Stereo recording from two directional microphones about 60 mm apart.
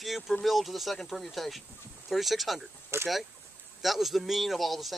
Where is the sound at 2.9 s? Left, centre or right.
Right.